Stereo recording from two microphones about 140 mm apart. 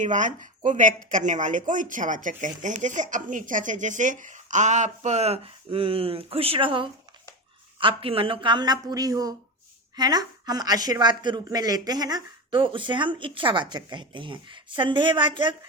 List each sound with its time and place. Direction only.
0.0 s speech: 65° right (ahead or behind); by 15.5 s 35° right (ahead or behind)